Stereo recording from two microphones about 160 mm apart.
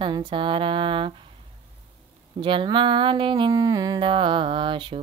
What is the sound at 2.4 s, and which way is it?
Speech, 30° right (ahead or behind).